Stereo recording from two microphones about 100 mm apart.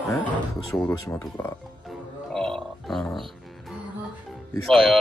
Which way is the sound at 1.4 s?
20° left (ahead or behind).